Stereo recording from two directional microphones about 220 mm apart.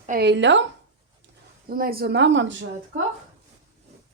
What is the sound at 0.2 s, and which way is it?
Speech, 50° right (ahead or behind).